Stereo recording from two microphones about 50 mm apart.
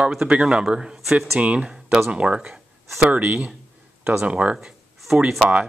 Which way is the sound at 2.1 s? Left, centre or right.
Right.